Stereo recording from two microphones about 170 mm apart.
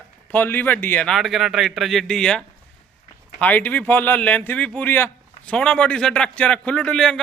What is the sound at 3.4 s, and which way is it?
A man's voice, 10° left (ahead or behind).